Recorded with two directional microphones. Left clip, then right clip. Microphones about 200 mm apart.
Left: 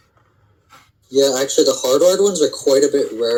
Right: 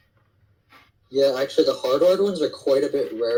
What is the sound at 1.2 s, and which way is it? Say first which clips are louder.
Speech: left 4 dB; 55° left (ahead or behind).